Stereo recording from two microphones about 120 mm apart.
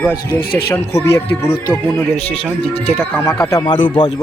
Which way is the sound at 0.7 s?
25° left (ahead or behind).